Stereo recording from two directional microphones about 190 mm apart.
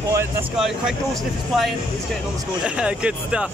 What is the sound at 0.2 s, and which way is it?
Speech, 5° right (ahead or behind).